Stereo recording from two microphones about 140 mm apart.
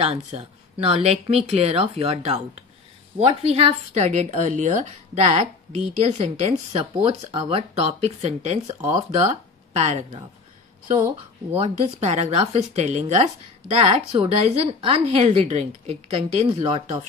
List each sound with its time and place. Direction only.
0.0 s a woman's voice: 50° right (ahead or behind)
11.5 s a woman's voice: 50° right (ahead or behind)